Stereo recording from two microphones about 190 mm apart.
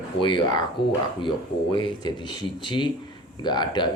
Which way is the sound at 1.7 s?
25° left (ahead or behind).